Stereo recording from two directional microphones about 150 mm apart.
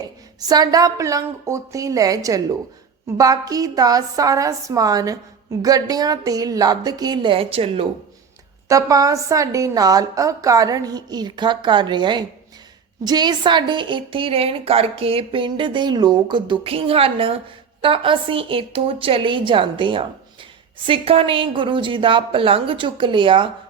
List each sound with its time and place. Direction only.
0.3 s a woman's voice: 25° right (ahead or behind)
8.7 s a woman's voice: 25° right (ahead or behind)